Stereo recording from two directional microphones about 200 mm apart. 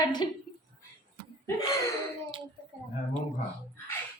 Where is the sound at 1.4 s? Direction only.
15° left (ahead or behind).